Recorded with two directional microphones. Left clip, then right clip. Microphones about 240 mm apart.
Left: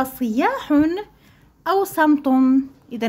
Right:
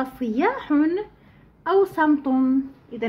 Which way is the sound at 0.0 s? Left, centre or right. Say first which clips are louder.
Left 3 dB; left.